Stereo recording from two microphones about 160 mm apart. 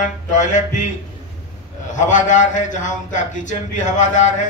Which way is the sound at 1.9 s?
50° left (ahead or behind).